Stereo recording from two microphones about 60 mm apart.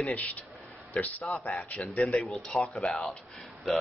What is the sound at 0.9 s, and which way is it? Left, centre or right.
A man's voice, left.